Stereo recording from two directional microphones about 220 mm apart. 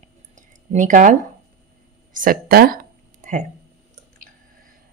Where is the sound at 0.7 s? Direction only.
35° right (ahead or behind).